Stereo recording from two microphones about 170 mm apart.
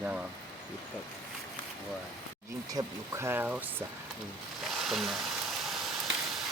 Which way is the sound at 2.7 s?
20° right (ahead or behind).